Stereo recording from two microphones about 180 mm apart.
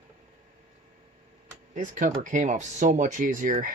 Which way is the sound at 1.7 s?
45° right (ahead or behind).